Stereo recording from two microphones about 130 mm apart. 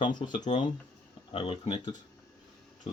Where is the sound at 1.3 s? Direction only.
45° left (ahead or behind).